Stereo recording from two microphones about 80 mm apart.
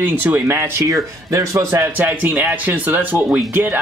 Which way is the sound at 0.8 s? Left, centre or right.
Right.